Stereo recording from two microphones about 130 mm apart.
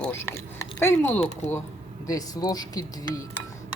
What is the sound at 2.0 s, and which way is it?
Speech, 30° left (ahead or behind).